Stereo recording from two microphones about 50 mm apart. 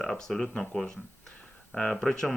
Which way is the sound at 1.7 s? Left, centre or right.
Left.